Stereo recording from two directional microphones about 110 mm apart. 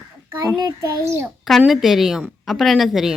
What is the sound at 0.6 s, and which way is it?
Speech, 30° right (ahead or behind).